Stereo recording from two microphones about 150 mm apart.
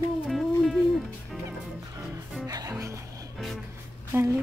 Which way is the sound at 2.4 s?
25° right (ahead or behind).